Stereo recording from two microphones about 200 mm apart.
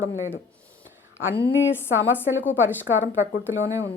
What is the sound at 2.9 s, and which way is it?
Speech, 75° left (ahead or behind).